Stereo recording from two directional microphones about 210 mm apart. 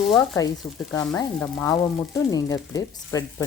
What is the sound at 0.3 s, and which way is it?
Speech, 15° left (ahead or behind).